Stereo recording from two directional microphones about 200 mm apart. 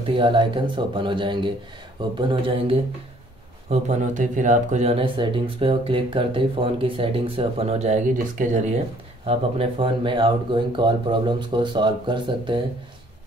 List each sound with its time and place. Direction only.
0.0 s speech: 25° right (ahead or behind)
3.7 s speech: 35° right (ahead or behind)